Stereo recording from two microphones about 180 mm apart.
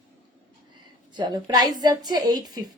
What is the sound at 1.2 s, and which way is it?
Speech, 25° right (ahead or behind).